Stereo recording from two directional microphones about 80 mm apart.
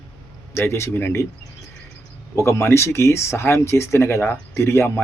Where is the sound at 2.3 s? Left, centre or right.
Left.